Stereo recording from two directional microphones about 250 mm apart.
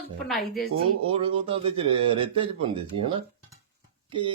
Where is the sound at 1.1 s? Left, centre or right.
Right.